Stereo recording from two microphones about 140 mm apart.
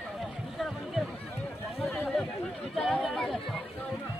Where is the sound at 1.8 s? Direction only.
Centre (ahead or behind).